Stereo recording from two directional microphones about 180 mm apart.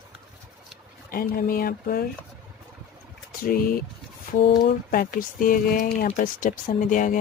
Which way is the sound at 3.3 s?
50° left (ahead or behind).